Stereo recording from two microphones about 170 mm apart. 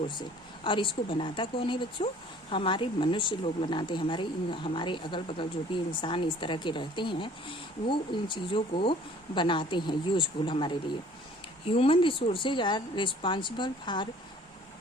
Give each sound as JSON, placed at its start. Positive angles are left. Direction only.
{"t": 0.1, "sound": "speech", "side_deg": 30}